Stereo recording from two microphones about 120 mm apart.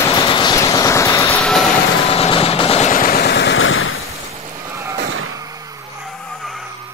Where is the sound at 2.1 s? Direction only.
55° left (ahead or behind).